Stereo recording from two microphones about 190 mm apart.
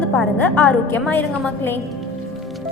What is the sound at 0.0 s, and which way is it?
A woman's voice, 5° left (ahead or behind).